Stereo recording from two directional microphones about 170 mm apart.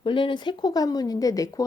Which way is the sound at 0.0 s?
30° left (ahead or behind).